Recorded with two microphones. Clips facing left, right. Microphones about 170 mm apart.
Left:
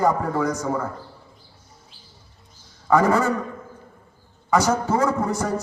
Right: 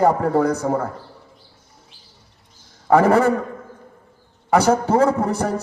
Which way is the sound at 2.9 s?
60° right (ahead or behind).